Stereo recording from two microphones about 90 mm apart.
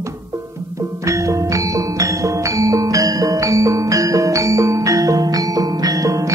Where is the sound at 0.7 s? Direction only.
35° right (ahead or behind).